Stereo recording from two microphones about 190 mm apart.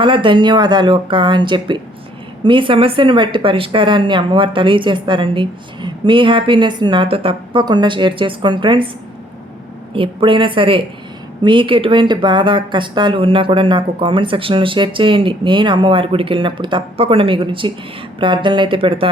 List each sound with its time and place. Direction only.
0.0 s a woman's voice: 25° right (ahead or behind)
9.9 s a woman's voice: 25° right (ahead or behind)